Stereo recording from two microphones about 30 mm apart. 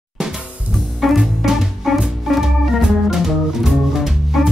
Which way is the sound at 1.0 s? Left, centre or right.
Centre.